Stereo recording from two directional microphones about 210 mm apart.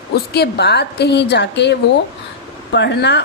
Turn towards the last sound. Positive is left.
turn(degrees=55)  # may be behind; listen again after turning